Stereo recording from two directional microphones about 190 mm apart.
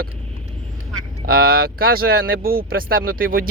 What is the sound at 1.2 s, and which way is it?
Speech, 50° right (ahead or behind).